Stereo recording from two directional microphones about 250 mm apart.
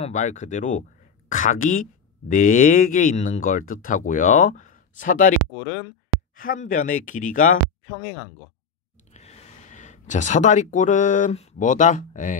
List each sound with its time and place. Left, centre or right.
0.0 s speech: left
6.3 s speech: left
9.1 s speech: left